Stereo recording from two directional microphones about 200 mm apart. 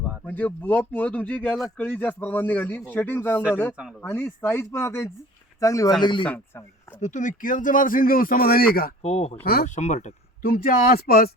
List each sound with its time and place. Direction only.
0.3 s speech: 10° left (ahead or behind)
7.0 s speech: 40° left (ahead or behind)
9.0 s speech: 30° left (ahead or behind)
9.4 s speech: 50° left (ahead or behind)